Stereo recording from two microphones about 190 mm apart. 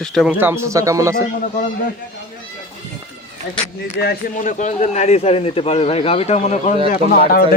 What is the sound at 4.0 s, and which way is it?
A man's voice, 50° left (ahead or behind).